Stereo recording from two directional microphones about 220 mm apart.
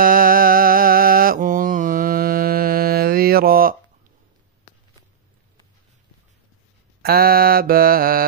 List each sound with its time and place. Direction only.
0.0 s mantra: 40° right (ahead or behind)
7.0 s mantra: 45° right (ahead or behind)